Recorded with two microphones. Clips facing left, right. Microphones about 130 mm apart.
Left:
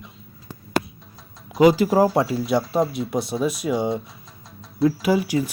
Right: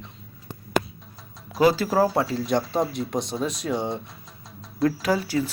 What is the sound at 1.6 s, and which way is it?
Speech, 15° left (ahead or behind).